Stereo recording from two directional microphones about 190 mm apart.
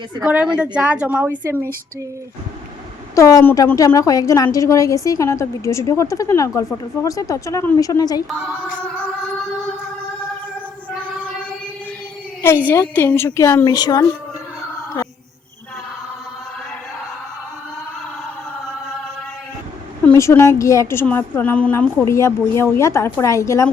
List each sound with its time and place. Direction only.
0.2 s a woman's voice: 5° right (ahead or behind)
3.2 s a woman's voice: 15° left (ahead or behind)
12.6 s a woman's voice: 10° left (ahead or behind)
20.1 s a woman's voice: 15° left (ahead or behind)